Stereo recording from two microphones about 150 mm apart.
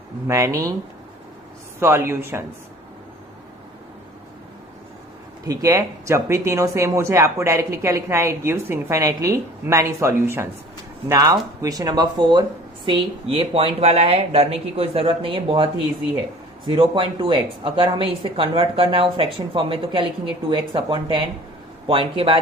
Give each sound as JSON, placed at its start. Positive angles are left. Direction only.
{"t": 0.3, "sound": "speech", "side_deg": -20}
{"t": 1.8, "sound": "speech", "side_deg": -15}
{"t": 5.5, "sound": "speech", "side_deg": -20}